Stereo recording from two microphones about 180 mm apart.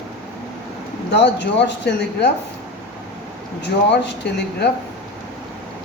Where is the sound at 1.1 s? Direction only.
70° left (ahead or behind).